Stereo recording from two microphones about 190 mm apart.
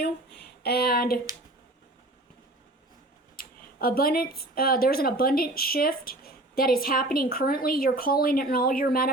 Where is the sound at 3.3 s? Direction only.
50° left (ahead or behind).